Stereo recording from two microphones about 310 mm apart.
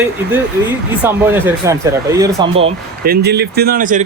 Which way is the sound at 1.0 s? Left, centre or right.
Centre.